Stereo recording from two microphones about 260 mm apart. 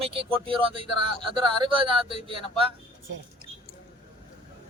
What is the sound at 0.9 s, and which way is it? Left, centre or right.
Speech, right.